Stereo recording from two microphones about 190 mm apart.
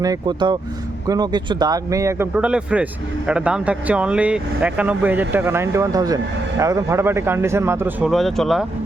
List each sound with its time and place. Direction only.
0.0 s speech: 20° right (ahead or behind); by 8.6 s centre (ahead or behind)